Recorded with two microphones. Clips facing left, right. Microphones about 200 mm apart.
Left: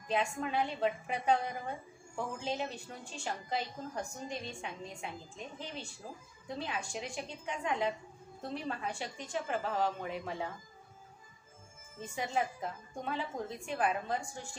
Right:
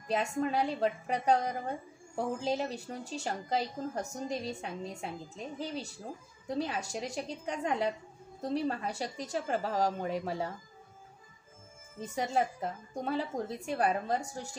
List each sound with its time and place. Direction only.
0.1 s a woman's voice: 40° right (ahead or behind)
12.0 s a woman's voice: 40° right (ahead or behind)